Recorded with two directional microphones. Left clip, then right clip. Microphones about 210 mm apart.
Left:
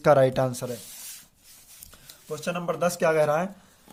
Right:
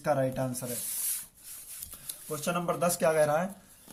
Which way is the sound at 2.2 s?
15° left (ahead or behind).